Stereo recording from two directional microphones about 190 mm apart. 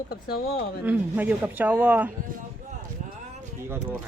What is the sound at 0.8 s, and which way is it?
Speech, 10° right (ahead or behind).